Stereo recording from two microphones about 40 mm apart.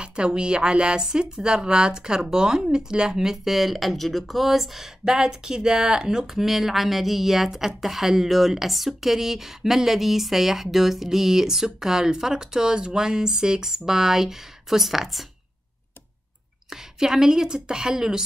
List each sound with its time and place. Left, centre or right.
0.0 s speech: right; by 15.2 s centre
16.7 s speech: centre